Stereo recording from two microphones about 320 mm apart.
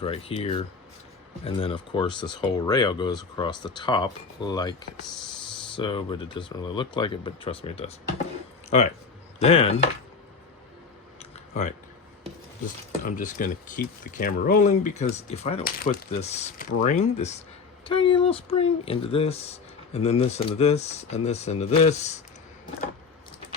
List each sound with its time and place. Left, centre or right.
0.0 s speech: centre
9.4 s speech: centre
11.2 s a sound: left
12.6 s speech: left